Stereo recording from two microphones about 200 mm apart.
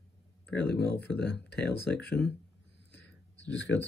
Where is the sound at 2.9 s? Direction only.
60° left (ahead or behind).